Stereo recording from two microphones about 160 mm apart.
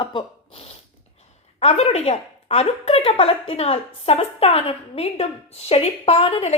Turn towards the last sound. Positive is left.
turn(degrees=40)  # may be behind; listen again after turning